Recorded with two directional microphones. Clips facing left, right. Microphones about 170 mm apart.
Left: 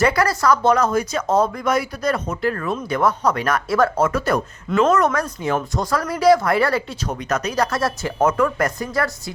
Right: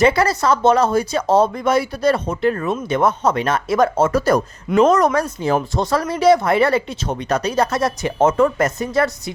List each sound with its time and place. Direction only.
0.0 s speech: 25° right (ahead or behind)
4.1 s speech: 40° right (ahead or behind)
4.7 s speech: 20° right (ahead or behind)
4.9 s speech: 35° right (ahead or behind)